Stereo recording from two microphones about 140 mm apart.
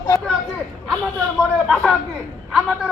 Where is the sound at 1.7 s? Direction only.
Centre (ahead or behind).